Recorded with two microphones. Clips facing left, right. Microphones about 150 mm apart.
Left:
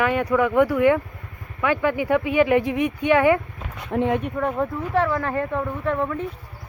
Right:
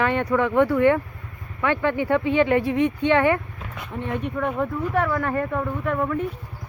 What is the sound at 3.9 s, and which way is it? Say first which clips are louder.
Speech: left 8 dB; 75° left (ahead or behind).